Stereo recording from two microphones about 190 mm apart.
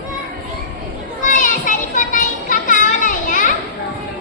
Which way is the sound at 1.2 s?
45° left (ahead or behind).